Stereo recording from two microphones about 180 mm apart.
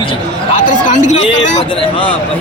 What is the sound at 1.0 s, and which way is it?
Speech, 40° left (ahead or behind).